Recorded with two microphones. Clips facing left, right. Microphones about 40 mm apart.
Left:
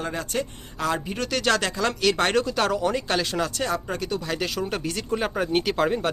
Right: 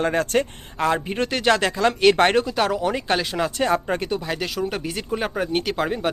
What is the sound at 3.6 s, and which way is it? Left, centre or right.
Speech, right.